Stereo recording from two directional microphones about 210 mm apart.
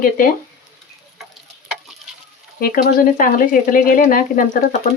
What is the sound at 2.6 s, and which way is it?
Speech, 45° left (ahead or behind).